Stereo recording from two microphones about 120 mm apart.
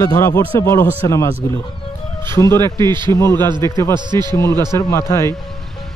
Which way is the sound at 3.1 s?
20° left (ahead or behind).